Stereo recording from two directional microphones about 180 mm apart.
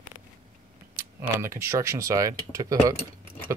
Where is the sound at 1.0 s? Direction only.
15° right (ahead or behind).